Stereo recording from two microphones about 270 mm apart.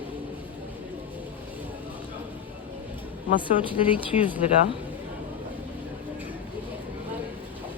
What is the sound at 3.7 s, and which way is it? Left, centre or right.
Speech, centre.